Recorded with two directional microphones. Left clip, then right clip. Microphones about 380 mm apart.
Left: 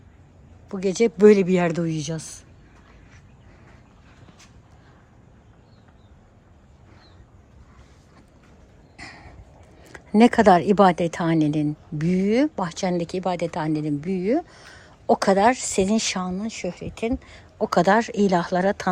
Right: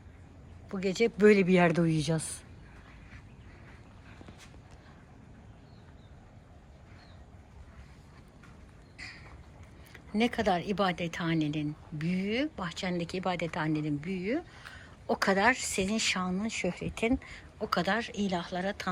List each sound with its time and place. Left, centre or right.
0.7 s a woman's voice: centre
10.1 s a woman's voice: left